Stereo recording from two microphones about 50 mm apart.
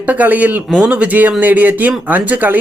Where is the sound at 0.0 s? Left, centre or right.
Right.